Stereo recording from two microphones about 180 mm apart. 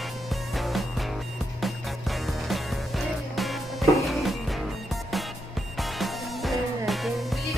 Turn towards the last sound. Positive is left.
turn(degrees=0)  # may be behind; listen again after turning